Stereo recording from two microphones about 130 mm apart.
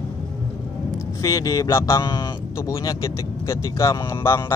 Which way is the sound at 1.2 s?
30° left (ahead or behind).